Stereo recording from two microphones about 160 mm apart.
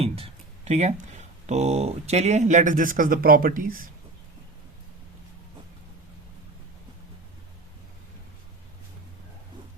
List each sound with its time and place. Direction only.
0.0 s speech: 40° right (ahead or behind); by 3.8 s 60° right (ahead or behind)